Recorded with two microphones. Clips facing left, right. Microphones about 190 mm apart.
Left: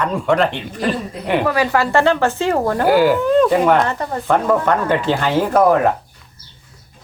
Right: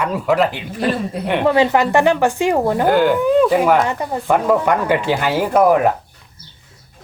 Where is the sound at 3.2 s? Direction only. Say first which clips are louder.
Even; 5° right (ahead or behind).